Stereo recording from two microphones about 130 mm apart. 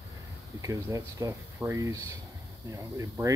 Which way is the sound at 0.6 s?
25° right (ahead or behind).